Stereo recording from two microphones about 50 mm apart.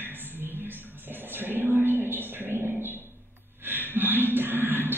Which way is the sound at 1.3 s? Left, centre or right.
Right.